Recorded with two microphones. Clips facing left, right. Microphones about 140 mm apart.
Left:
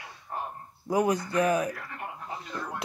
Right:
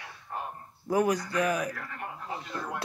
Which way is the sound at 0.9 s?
25° left (ahead or behind).